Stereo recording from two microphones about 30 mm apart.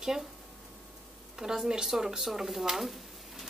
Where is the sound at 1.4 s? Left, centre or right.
Right.